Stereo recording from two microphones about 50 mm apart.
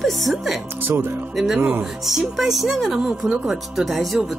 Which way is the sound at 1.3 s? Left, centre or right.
Centre.